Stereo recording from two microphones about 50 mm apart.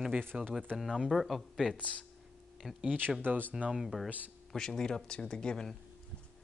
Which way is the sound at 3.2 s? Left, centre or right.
Right.